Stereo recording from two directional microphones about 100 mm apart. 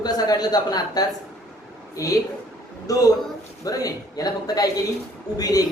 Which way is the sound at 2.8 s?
35° left (ahead or behind).